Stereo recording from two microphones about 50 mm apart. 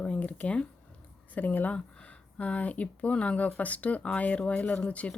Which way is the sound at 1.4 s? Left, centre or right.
Left.